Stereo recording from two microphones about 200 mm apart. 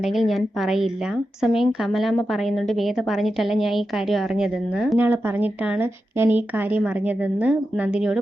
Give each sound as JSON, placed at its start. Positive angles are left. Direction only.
{"t": 0.0, "sound": "a woman's voice", "side_deg": 0}